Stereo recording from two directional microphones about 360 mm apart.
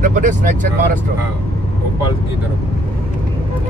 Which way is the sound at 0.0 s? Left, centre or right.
Right.